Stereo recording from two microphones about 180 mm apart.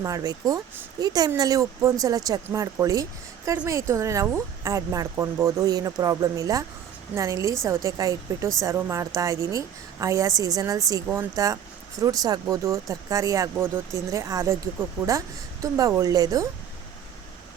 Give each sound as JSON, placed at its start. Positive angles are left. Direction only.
{"t": 0.0, "sound": "speech", "side_deg": -20}